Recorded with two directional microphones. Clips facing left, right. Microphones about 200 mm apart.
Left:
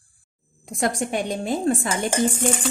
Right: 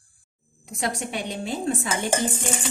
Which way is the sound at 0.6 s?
50° left (ahead or behind).